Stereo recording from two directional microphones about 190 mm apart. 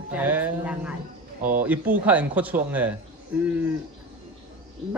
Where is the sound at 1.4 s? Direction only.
45° right (ahead or behind).